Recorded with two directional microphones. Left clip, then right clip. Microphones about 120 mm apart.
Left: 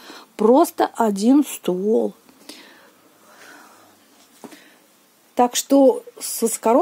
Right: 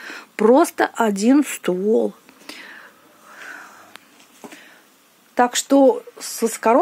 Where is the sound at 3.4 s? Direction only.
15° left (ahead or behind).